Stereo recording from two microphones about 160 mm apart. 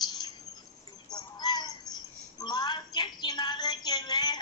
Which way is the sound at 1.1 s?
25° left (ahead or behind).